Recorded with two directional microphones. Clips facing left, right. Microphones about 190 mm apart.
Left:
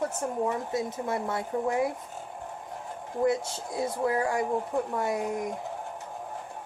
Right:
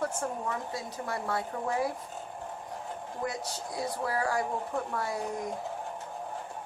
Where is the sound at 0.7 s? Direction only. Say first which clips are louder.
Left 6 dB; 20° left (ahead or behind).